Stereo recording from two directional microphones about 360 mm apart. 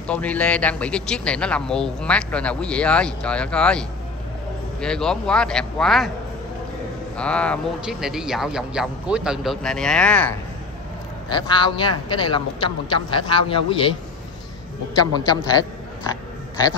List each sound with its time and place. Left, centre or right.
0.0 s speech: centre
7.2 s a man's voice: centre
15.1 s a man's voice: centre